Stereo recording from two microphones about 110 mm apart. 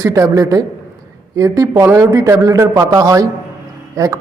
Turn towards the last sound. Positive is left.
turn(degrees=-30)  # may be behind; listen again after turning